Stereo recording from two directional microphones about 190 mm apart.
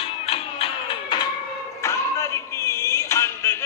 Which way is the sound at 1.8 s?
15° left (ahead or behind).